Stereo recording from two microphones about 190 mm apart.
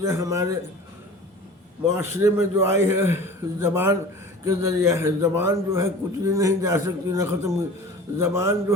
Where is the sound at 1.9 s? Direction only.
15° right (ahead or behind).